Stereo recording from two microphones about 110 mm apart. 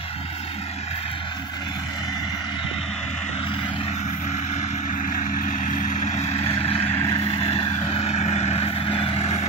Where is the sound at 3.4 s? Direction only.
50° left (ahead or behind).